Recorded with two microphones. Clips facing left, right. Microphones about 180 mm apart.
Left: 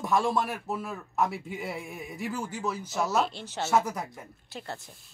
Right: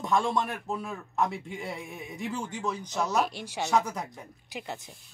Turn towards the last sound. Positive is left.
turn(degrees=-15)  # may be behind; listen again after turning